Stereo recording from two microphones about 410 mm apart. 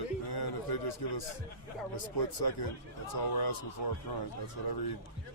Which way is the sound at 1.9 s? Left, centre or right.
Left.